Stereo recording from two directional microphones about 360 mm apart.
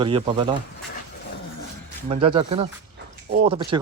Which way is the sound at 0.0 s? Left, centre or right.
Centre.